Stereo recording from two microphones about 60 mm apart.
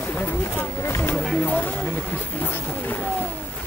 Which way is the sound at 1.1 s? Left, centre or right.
Centre.